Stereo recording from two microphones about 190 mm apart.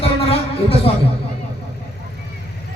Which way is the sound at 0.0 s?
30° left (ahead or behind).